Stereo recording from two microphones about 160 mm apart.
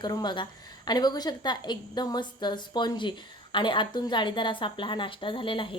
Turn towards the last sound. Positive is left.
turn(degrees=30)  # may be behind; listen again after turning